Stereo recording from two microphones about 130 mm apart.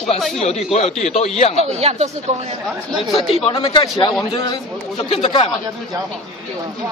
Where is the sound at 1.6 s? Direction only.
50° right (ahead or behind).